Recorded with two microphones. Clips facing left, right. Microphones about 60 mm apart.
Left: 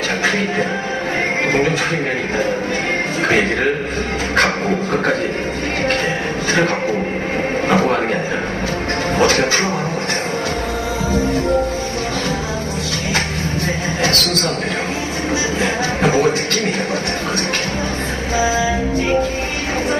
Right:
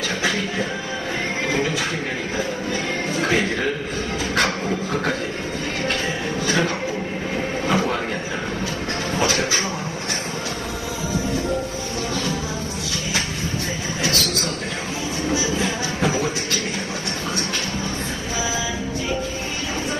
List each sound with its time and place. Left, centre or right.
0.2 s speech: left
3.3 s speech: left
7.6 s a sound: left
9.2 s speech: left
11.1 s speech: left
14.0 s speech: left
16.0 s speech: left
18.4 s speech: left